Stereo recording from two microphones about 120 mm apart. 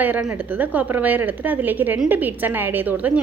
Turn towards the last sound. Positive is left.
turn(degrees=-15)  # may be behind; listen again after turning